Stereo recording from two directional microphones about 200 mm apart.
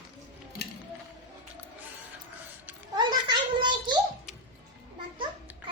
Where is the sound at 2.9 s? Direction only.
20° right (ahead or behind).